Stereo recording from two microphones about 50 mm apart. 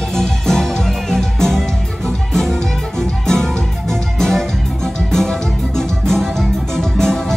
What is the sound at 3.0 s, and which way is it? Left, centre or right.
Music, centre.